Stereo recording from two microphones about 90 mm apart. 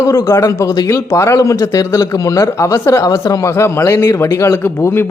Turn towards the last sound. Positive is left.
turn(degrees=35)  # may be behind; listen again after turning